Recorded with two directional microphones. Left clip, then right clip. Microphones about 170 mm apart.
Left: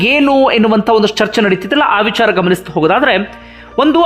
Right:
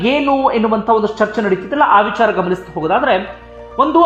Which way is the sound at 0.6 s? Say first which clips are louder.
Left 3 dB; 45° left (ahead or behind).